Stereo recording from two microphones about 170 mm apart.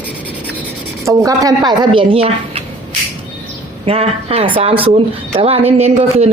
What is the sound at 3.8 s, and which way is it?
Speech, 35° right (ahead or behind).